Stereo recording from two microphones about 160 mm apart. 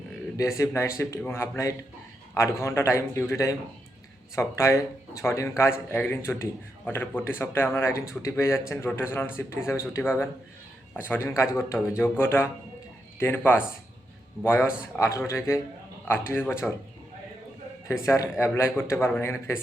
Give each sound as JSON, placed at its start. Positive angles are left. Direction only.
{"t": 0.3, "sound": "speech", "side_deg": 20}
{"t": 18.0, "sound": "speech", "side_deg": 15}